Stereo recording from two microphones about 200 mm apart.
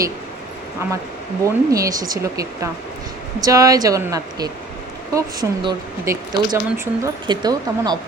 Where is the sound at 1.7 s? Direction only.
15° right (ahead or behind).